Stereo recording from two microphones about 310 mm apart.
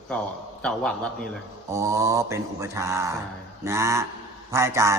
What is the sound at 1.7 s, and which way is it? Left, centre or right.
A man's voice, centre.